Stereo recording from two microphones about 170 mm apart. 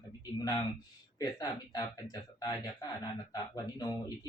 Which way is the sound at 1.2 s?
20° left (ahead or behind).